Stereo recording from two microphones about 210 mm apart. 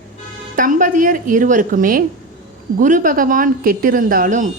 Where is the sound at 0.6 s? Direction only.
40° right (ahead or behind).